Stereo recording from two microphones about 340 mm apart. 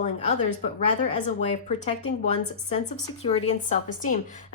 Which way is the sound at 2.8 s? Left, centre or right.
Left.